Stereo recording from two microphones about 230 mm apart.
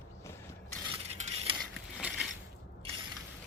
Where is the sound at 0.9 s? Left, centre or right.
Right.